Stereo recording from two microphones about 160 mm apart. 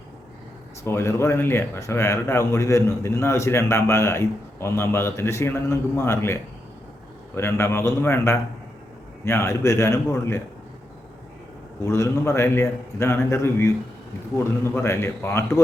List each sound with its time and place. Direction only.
0.9 s a man's voice: 15° left (ahead or behind)
11.8 s a man's voice: 15° left (ahead or behind)